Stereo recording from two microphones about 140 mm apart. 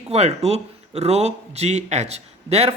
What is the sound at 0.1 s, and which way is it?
Speech, 50° right (ahead or behind).